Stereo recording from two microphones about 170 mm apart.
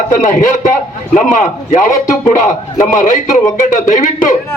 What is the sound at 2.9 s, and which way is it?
A man's voice, 50° left (ahead or behind).